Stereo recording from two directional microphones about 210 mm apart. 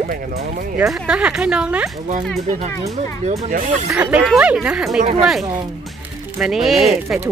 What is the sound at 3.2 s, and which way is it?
Speech, 35° right (ahead or behind).